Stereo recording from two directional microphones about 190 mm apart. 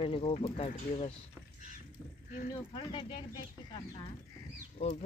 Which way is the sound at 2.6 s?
25° left (ahead or behind).